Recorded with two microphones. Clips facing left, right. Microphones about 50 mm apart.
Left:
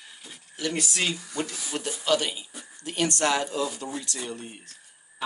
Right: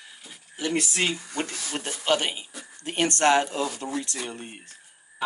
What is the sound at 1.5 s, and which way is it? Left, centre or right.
Speech, right.